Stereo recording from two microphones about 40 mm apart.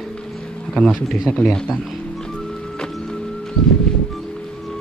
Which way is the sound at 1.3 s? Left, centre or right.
Centre.